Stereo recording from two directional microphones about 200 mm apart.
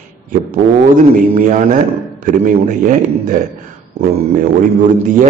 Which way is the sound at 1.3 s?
40° right (ahead or behind).